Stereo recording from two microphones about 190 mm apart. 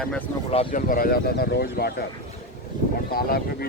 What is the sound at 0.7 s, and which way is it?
Speech, 50° left (ahead or behind).